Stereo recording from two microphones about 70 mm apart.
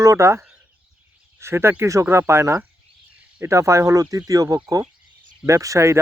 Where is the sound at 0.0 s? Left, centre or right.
Right.